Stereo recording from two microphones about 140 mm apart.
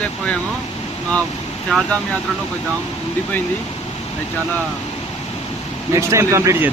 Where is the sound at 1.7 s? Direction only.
5° left (ahead or behind).